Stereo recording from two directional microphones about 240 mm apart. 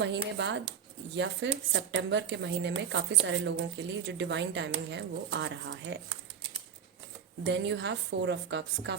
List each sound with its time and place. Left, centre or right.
0.0 s a woman's voice: right
7.4 s a woman's voice: right